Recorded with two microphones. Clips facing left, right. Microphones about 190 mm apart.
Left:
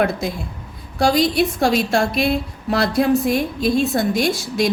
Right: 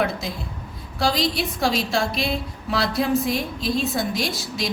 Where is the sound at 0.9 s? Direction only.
50° left (ahead or behind).